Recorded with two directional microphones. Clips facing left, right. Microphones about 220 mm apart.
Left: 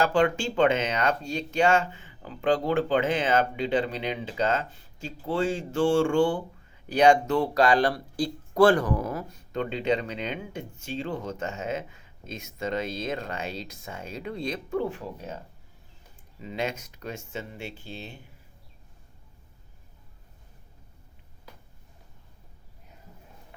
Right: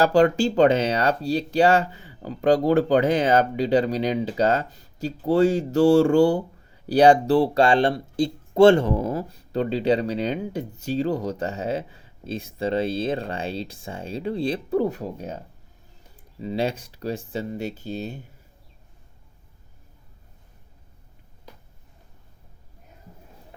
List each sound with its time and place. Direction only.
0.0 s speech: 40° right (ahead or behind)
16.4 s speech: 35° right (ahead or behind)